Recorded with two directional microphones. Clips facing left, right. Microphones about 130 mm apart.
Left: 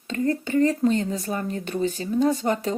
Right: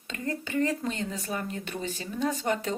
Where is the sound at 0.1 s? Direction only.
35° left (ahead or behind).